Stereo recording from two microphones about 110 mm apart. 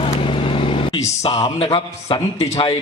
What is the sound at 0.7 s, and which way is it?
Vehicle, 55° left (ahead or behind).